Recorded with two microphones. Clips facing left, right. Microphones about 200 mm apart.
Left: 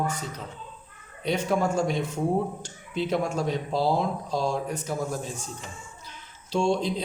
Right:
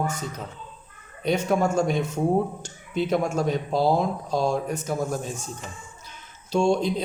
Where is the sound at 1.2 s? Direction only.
45° right (ahead or behind).